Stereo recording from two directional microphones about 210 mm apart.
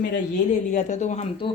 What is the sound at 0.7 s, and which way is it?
Speech, 35° left (ahead or behind).